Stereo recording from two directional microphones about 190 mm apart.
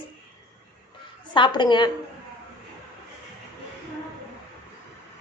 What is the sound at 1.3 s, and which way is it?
Speech, 25° left (ahead or behind).